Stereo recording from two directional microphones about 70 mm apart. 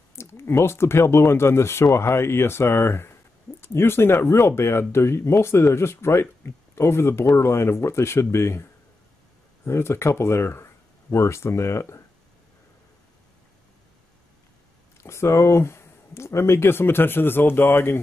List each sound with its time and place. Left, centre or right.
0.1 s speech: left
9.7 s speech: left
15.0 s speech: left